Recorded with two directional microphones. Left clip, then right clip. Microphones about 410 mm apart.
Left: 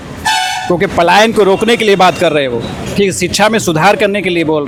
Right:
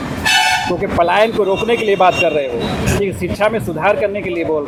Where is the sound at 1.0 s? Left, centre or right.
Left.